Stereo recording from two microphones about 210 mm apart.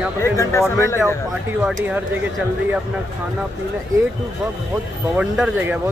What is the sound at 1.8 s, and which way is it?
A man's voice, 5° right (ahead or behind).